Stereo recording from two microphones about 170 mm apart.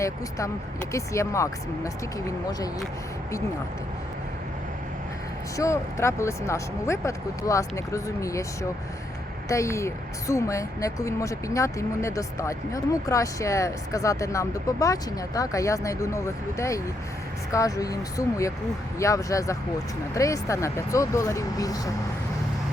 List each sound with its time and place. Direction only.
0.0 s speech: 20° left (ahead or behind)
5.5 s speech: 15° left (ahead or behind)
9.5 s speech: 15° left (ahead or behind)